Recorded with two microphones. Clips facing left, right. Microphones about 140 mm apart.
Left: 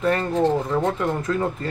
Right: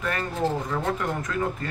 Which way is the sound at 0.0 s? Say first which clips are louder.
Left 7 dB; 30° left (ahead or behind).